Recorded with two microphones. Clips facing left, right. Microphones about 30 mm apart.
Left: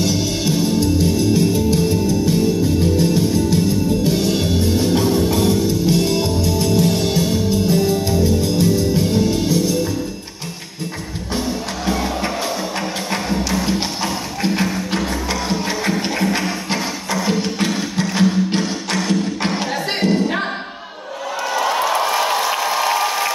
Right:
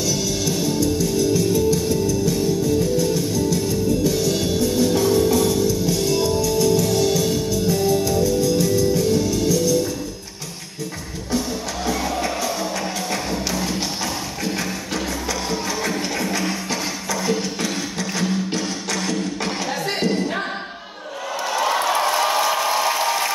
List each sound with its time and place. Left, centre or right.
0.0 s music: left
13.7 s music: left
16.3 s music: left
19.4 s music: left
20.0 s music: left